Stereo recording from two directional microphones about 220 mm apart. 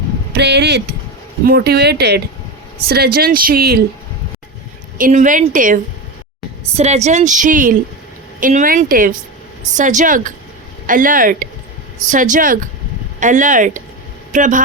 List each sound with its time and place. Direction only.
0.3 s speech: 50° right (ahead or behind)
4.9 s a woman's voice: 35° right (ahead or behind)